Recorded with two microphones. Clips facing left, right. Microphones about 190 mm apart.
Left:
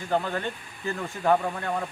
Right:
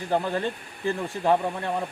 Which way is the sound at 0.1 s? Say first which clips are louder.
Right 1 dB; 15° right (ahead or behind).